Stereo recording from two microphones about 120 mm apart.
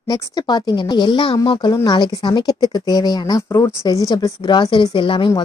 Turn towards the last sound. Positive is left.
turn(degrees=45)  # may be behind; listen again after turning